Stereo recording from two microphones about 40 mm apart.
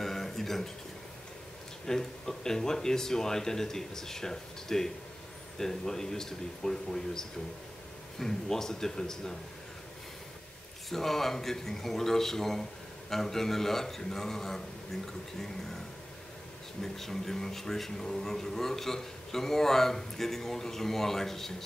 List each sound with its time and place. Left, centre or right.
0.0 s a sound: centre
1.9 s speech: centre
10.9 s speech: centre
16.8 s speech: centre